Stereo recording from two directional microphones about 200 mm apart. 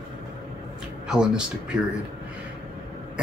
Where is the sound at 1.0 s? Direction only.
5° right (ahead or behind).